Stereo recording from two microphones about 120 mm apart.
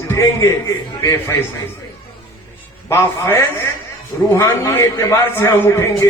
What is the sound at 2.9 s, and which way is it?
A man's voice, 20° left (ahead or behind).